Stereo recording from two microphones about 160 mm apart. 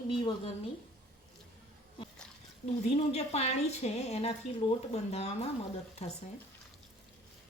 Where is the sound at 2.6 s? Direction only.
45° left (ahead or behind).